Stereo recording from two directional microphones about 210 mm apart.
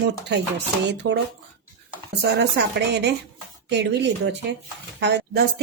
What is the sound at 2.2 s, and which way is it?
A woman's voice, 55° right (ahead or behind).